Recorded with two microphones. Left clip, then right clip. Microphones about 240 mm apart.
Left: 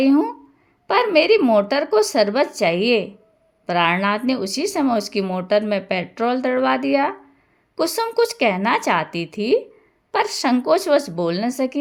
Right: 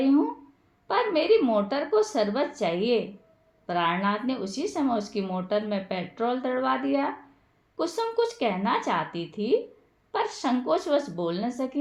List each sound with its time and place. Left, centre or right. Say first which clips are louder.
0.0 s speech: left 6 dB; left